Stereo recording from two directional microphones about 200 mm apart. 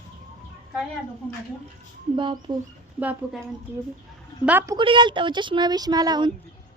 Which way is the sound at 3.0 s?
5° right (ahead or behind).